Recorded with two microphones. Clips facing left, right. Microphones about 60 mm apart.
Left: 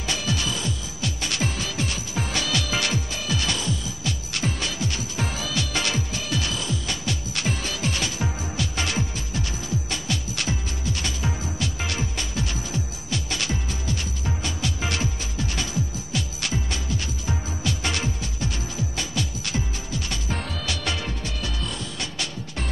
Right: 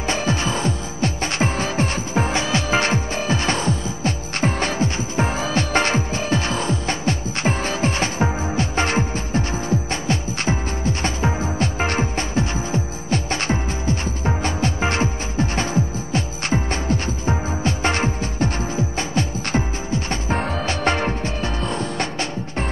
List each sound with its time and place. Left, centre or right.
0.0 s music: right